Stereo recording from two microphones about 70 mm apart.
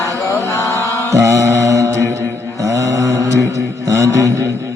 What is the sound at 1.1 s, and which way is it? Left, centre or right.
Mantra, right.